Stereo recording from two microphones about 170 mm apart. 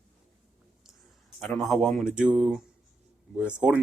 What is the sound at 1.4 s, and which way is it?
Speech, 5° left (ahead or behind).